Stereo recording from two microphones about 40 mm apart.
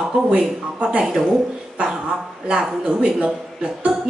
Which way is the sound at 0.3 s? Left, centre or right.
Right.